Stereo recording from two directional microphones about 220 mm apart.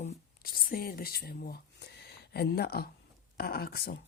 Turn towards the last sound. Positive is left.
turn(degrees=40)  # may be behind; listen again after turning